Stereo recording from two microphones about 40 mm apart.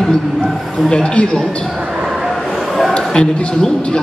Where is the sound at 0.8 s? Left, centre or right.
Left.